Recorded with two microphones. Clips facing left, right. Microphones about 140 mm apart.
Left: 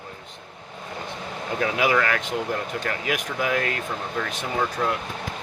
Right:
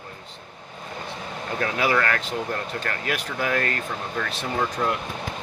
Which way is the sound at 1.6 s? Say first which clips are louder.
Left 1 dB; 10° left (ahead or behind).